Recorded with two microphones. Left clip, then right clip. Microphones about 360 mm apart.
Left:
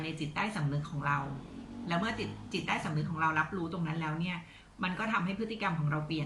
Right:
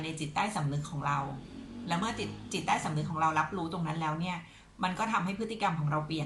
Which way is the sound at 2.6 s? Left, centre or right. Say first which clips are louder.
Right 5 dB; centre.